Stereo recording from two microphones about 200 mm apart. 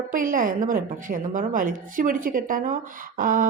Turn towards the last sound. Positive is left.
turn(degrees=-45)  # may be behind; listen again after turning